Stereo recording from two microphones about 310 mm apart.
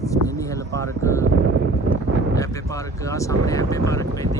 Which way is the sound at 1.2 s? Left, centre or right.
Right.